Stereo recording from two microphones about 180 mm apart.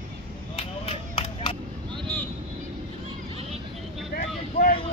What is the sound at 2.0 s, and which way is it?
Vehicle, 5° left (ahead or behind).